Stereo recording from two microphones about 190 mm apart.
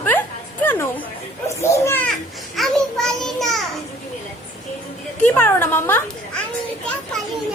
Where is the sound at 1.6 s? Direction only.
15° left (ahead or behind).